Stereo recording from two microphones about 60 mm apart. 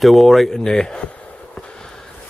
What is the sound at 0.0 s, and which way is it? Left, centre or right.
Speech, centre.